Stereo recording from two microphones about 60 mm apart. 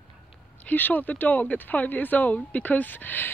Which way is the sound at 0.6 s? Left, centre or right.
Left.